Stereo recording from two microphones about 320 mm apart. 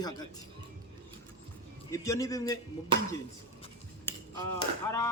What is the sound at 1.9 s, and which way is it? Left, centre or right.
Speech, centre.